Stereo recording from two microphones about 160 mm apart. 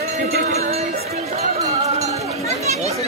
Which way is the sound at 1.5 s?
40° right (ahead or behind).